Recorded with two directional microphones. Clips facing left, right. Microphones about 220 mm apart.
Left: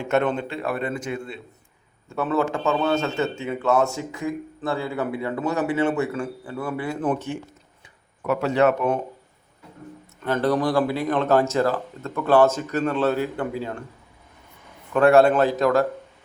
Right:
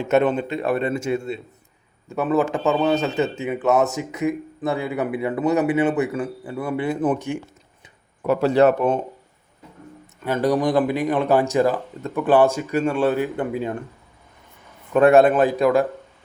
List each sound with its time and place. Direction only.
0.1 s a man's voice: 15° right (ahead or behind)
8.3 s speech: 35° right (ahead or behind)
10.2 s a man's voice: 10° right (ahead or behind)
14.9 s a man's voice: 20° right (ahead or behind)